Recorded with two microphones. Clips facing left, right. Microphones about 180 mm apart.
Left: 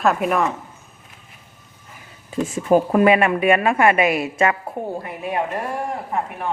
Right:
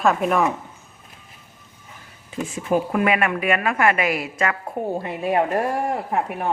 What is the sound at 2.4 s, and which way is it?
Speech, 35° left (ahead or behind).